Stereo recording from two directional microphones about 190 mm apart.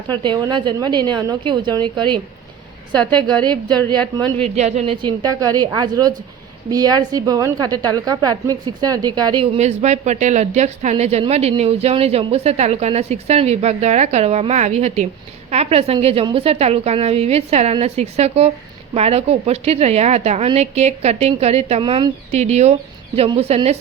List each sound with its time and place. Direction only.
0.2 s a woman's voice: 25° right (ahead or behind)
3.8 s a woman's voice: 10° left (ahead or behind)
4.1 s a woman's voice: 25° right (ahead or behind)